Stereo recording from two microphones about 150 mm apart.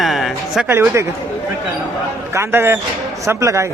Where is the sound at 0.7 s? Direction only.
15° right (ahead or behind).